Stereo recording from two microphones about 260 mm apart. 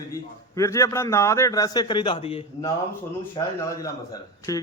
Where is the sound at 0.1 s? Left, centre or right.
Centre.